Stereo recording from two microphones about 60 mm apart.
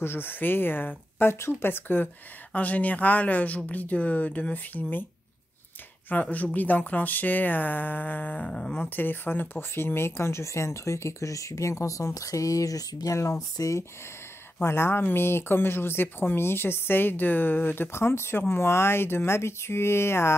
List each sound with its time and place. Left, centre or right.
0.0 s speech: left
2.5 s speech: left
6.3 s speech: left
8.5 s speech: centre
8.8 s speech: left
14.6 s speech: left